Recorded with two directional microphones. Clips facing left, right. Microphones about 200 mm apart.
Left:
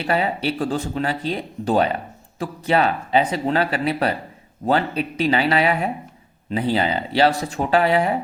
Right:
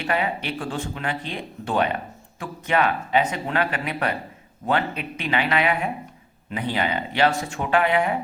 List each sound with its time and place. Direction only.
0.0 s speech: 35° left (ahead or behind)